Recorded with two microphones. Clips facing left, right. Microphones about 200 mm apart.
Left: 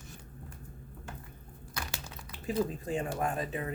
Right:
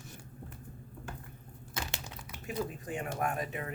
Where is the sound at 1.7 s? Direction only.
25° right (ahead or behind).